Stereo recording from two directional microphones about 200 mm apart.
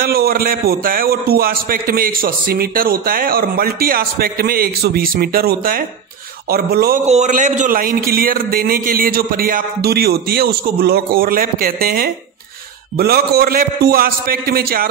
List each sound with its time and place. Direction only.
0.0 s a man's voice: 50° right (ahead or behind)
7.1 s a man's voice: 35° right (ahead or behind)